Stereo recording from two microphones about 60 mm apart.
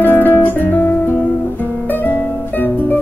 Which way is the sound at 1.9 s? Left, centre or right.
Left.